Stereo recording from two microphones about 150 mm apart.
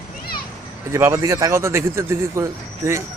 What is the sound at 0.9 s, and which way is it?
A man's voice, 20° right (ahead or behind).